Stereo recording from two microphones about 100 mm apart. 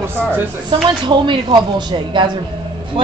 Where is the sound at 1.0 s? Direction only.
50° right (ahead or behind).